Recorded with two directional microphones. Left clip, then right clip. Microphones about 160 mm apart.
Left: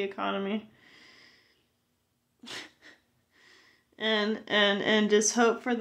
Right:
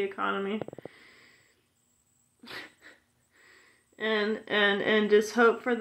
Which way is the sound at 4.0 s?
45° left (ahead or behind).